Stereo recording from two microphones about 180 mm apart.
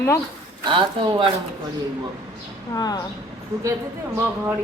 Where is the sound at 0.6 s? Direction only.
25° right (ahead or behind).